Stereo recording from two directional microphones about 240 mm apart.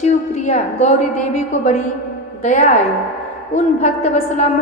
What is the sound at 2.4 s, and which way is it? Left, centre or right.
Speech, left.